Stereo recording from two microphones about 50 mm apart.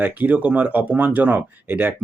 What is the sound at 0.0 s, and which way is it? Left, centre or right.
Speech, right.